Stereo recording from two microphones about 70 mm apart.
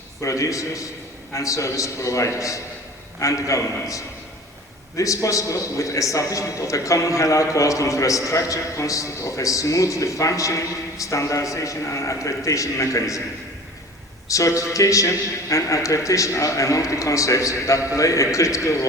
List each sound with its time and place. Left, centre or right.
0.2 s a man's voice: left
14.3 s a man's voice: left